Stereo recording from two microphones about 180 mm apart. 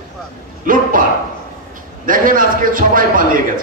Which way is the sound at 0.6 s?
50° right (ahead or behind).